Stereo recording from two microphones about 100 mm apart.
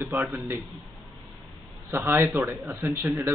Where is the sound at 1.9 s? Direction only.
20° right (ahead or behind).